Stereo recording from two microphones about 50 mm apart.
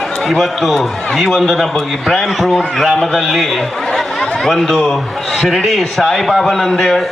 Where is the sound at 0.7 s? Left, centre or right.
Centre.